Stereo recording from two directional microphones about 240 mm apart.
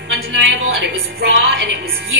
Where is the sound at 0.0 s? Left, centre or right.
Right.